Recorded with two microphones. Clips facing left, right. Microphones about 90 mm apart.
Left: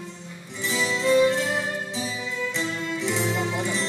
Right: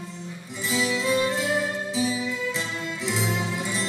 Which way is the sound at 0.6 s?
5° right (ahead or behind).